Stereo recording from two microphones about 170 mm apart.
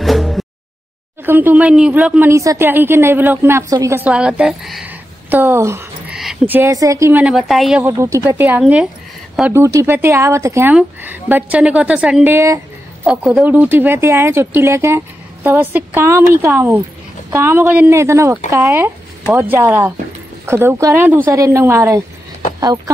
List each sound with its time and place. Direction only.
0.0 s a sound: centre (ahead or behind)
1.2 s speech: 10° right (ahead or behind)
7.8 s speech: 15° right (ahead or behind)